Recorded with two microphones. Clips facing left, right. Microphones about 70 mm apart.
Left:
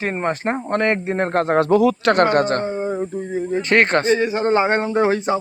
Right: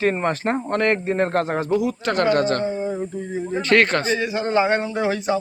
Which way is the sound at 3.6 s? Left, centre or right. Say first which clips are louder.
Left 2 dB; left.